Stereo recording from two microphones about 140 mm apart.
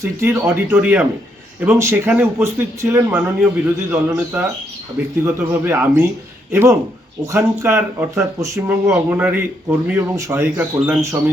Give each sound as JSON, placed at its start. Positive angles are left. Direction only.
{"t": 0.0, "sound": "speech", "side_deg": -20}